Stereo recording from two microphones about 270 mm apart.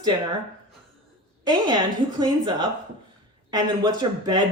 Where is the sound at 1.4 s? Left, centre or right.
Centre.